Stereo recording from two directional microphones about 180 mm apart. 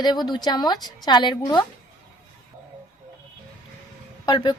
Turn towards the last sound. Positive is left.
turn(degrees=25)  # may be behind; listen again after turning